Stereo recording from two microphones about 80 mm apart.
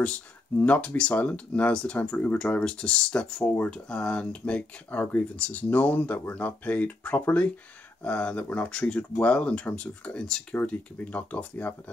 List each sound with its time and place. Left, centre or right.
0.6 s speech: centre